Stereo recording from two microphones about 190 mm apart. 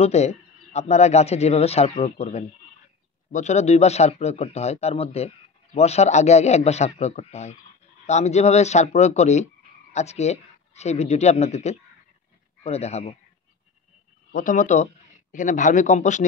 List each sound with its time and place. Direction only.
0.0 s speech: 35° left (ahead or behind)
14.3 s speech: 45° left (ahead or behind)